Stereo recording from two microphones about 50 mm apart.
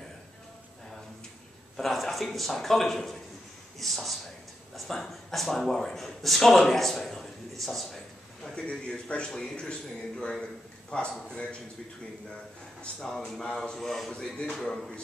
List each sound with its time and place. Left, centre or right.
1.8 s speech: centre
8.5 s a man's voice: centre
12.8 s a man's voice: centre